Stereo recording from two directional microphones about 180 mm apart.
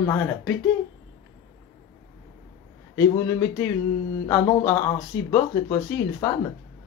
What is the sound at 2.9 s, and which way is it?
Speech, 15° left (ahead or behind).